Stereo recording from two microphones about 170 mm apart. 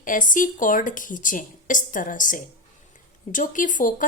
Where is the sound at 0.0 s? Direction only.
50° left (ahead or behind).